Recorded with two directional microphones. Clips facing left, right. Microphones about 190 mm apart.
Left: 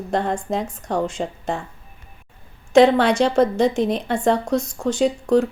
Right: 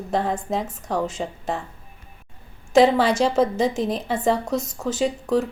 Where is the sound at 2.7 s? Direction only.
Centre (ahead or behind).